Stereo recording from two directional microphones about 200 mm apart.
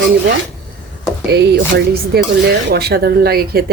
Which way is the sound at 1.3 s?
55° right (ahead or behind).